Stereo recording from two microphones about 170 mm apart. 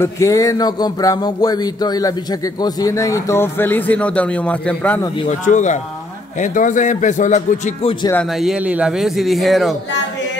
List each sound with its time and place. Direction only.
0.0 s a sound: 20° left (ahead or behind)
5.3 s speech: 45° left (ahead or behind)
8.4 s a man's voice: 5° right (ahead or behind)